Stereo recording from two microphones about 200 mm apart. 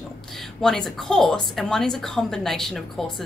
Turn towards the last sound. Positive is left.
turn(degrees=0)  # may be behind; listen again after turning